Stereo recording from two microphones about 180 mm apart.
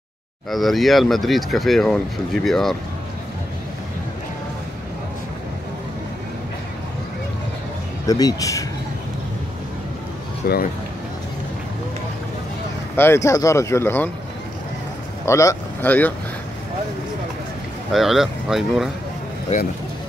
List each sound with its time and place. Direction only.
0.5 s speech: centre (ahead or behind)
8.1 s speech: 20° left (ahead or behind)
10.4 s speech: 55° left (ahead or behind)
12.9 s speech: 15° left (ahead or behind)
15.2 s speech: 15° left (ahead or behind)
17.9 s speech: centre (ahead or behind)